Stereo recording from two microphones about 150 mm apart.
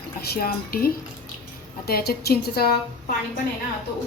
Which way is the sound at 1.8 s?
90° left.